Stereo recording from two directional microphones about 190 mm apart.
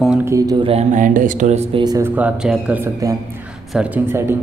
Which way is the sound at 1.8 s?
15° right (ahead or behind).